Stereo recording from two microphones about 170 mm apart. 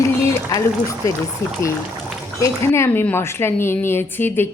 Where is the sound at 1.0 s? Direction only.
20° left (ahead or behind).